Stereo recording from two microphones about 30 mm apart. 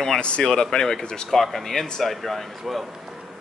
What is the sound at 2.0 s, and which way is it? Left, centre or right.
Speech, centre.